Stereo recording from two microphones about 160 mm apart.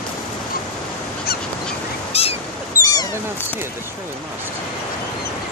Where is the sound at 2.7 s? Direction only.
25° left (ahead or behind).